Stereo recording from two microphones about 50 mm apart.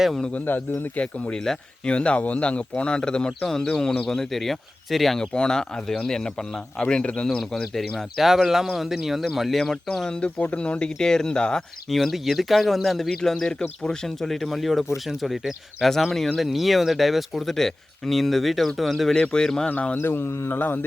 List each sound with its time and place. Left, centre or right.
1.3 s speech: centre
7.3 s speech: centre
10.2 s speech: left
11.9 s speech: centre
14.2 s speech: centre
19.1 s speech: centre
20.0 s speech: left